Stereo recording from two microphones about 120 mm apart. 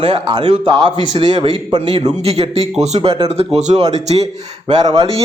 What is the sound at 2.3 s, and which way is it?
Speech, 60° right (ahead or behind).